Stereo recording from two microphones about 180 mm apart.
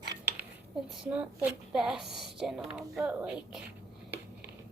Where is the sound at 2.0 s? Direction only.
65° right (ahead or behind).